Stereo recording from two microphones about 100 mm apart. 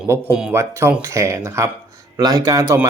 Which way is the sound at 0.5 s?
25° right (ahead or behind).